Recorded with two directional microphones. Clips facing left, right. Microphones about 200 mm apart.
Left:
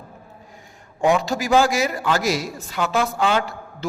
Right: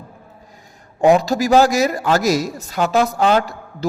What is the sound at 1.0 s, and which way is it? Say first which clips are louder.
A man's voice: right 6 dB; 40° right (ahead or behind).